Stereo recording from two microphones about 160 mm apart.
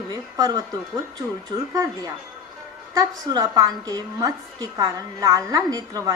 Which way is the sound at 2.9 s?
25° right (ahead or behind).